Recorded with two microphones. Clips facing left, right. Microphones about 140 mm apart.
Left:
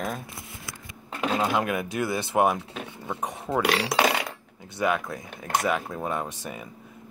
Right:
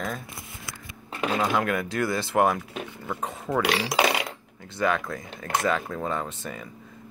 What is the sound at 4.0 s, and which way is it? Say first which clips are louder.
Coin: even; 10° right (ahead or behind).